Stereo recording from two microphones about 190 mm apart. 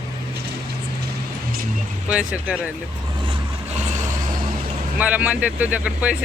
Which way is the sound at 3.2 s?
35° right (ahead or behind).